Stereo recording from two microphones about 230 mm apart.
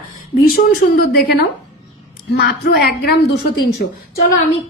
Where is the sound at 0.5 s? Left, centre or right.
Left.